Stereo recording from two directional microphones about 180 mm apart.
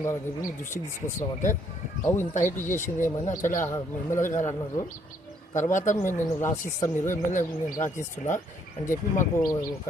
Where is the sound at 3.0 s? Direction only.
45° left (ahead or behind).